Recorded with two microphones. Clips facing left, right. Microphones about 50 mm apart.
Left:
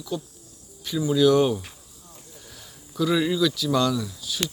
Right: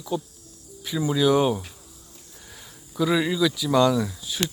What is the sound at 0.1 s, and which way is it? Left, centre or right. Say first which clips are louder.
Speech: right 3 dB; centre.